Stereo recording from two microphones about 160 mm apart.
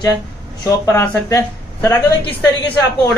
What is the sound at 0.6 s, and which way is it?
Speech, 20° left (ahead or behind).